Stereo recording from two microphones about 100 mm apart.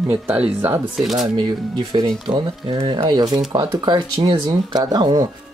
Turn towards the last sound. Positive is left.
turn(degrees=-45)  # may be behind; listen again after turning